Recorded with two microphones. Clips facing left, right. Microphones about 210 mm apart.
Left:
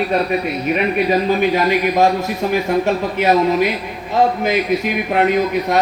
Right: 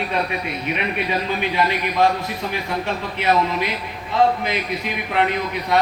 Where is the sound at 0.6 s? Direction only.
45° left (ahead or behind).